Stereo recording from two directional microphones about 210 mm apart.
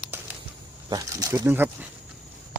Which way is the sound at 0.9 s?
15° right (ahead or behind).